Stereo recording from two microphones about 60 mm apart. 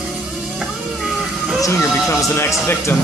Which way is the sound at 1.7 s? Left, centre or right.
Left.